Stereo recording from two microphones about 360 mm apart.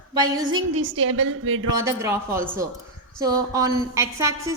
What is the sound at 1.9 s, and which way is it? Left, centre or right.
A woman's voice, centre.